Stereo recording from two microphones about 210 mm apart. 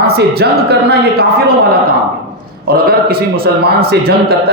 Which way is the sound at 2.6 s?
45° right (ahead or behind).